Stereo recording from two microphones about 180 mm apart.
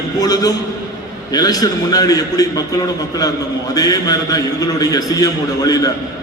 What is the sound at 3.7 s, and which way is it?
A man's voice, 20° left (ahead or behind).